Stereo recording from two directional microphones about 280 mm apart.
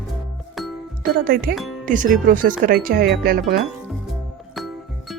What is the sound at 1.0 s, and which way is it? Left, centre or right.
Speech, right.